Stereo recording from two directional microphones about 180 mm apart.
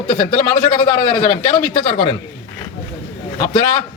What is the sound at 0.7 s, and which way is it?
Speech, 25° left (ahead or behind).